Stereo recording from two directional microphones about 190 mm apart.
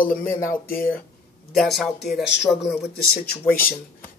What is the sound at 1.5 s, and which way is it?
Speech, centre (ahead or behind).